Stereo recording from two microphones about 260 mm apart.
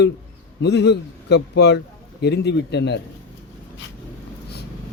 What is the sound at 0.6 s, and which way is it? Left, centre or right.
Speech, left.